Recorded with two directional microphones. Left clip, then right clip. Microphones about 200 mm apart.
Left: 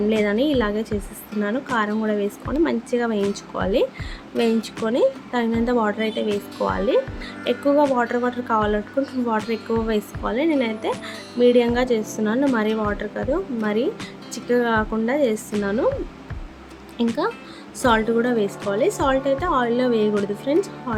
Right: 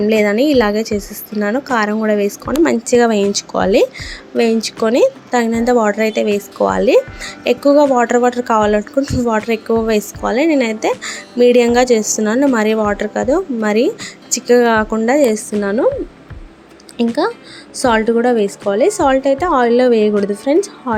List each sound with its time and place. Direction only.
0.1 s speech: 20° right (ahead or behind)
17.8 s speech: 30° right (ahead or behind)